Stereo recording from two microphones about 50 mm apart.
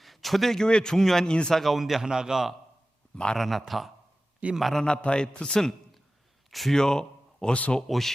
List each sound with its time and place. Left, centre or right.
0.0 s a man's voice: centre
1.3 s speech: centre
1.5 s a man's voice: centre
4.7 s a man's voice: centre
6.5 s speech: centre
6.7 s speech: centre
7.5 s speech: left
7.9 s a man's voice: centre